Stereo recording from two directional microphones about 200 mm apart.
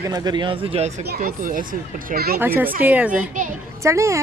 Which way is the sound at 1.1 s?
45° right (ahead or behind).